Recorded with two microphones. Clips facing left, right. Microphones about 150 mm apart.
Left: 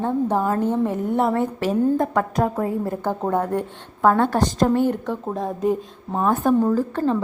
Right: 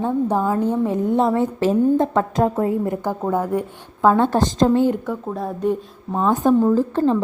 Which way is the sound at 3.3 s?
10° right (ahead or behind).